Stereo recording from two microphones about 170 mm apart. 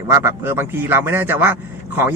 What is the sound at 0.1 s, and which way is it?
A man's voice, 15° right (ahead or behind).